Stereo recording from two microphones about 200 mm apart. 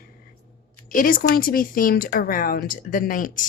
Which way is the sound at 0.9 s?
45° left (ahead or behind).